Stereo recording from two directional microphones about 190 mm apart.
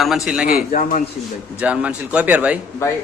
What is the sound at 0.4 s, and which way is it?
Speech, 45° left (ahead or behind).